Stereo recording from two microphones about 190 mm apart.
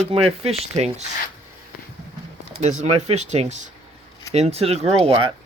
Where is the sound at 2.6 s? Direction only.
35° right (ahead or behind).